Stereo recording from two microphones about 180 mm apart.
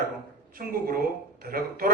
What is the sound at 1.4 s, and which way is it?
Speech, 55° right (ahead or behind).